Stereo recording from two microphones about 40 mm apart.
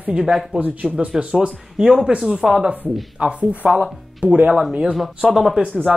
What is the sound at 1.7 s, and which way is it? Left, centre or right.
Speech, centre.